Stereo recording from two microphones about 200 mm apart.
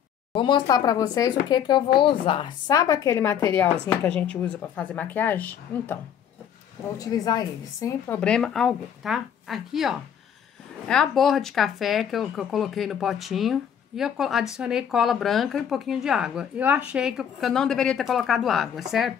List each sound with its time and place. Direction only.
0.3 s speech: 25° left (ahead or behind); by 5.9 s 10° left (ahead or behind)
7.0 s speech: 20° left (ahead or behind)
8.2 s speech: 5° left (ahead or behind)